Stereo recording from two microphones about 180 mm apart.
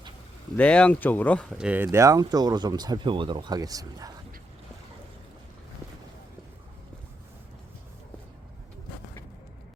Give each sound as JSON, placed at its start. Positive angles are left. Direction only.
{"t": 0.5, "sound": "speech", "side_deg": 5}
{"t": 1.5, "sound": "speech", "side_deg": -5}